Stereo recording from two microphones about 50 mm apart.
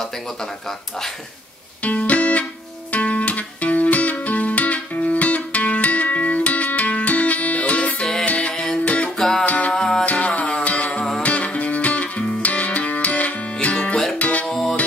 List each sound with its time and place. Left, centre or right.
1.8 s music: left
9.2 s music: centre
10.0 s music: left
14.5 s music: centre